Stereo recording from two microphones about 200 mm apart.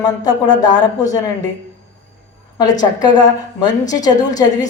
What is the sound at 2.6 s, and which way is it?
Speech, 20° left (ahead or behind).